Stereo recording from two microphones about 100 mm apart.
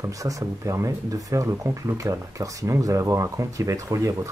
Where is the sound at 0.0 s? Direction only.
35° right (ahead or behind).